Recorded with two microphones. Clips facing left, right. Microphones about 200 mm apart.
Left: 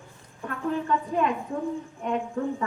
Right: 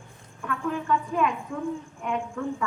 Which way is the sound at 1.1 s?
35° left (ahead or behind).